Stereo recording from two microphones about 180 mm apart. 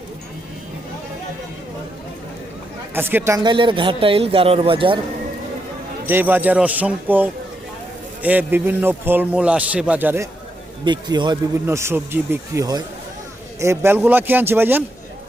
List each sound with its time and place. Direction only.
2.9 s speech: 10° right (ahead or behind); by 4.9 s 30° right (ahead or behind)
6.1 s a man's voice: 10° right (ahead or behind)
10.8 s a man's voice: 25° right (ahead or behind)